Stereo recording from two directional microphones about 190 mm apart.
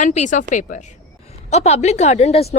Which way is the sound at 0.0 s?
40° left (ahead or behind).